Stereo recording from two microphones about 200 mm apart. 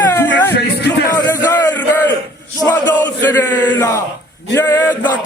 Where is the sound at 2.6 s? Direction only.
15° left (ahead or behind).